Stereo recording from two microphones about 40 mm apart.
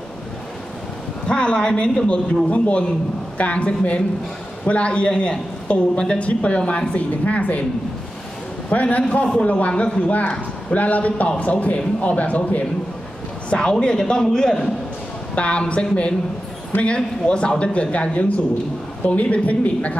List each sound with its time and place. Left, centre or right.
1.2 s a man's voice: left
2.5 s a man's voice: left
6.9 s a man's voice: left
8.8 s a man's voice: left
13.5 s a man's voice: left
15.3 s a man's voice: left